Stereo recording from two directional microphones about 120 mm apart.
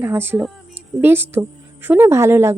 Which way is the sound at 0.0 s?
20° right (ahead or behind).